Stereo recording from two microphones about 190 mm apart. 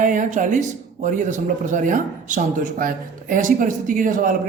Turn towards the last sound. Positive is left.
turn(degrees=-45)  # may be behind; listen again after turning